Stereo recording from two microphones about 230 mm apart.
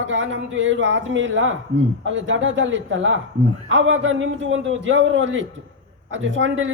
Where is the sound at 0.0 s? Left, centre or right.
Right.